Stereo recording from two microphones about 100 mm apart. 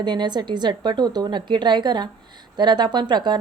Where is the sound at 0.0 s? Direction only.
50° right (ahead or behind).